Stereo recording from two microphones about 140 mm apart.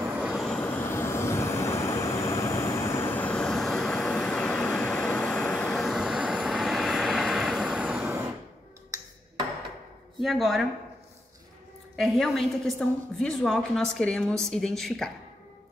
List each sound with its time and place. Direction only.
0.1 s vehicle: 5° right (ahead or behind)
10.2 s a woman's voice: centre (ahead or behind)
12.0 s a woman's voice: centre (ahead or behind)